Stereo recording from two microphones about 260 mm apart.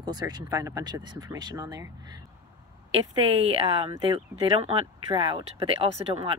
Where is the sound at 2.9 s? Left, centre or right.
Right.